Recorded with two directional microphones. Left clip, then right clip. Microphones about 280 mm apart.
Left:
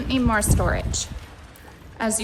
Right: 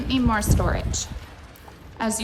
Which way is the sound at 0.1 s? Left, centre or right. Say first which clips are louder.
Left 1 dB; centre.